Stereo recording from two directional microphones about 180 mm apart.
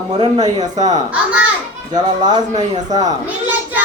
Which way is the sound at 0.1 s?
35° right (ahead or behind).